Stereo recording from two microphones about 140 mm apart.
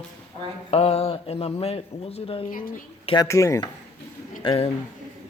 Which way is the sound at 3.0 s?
30° left (ahead or behind).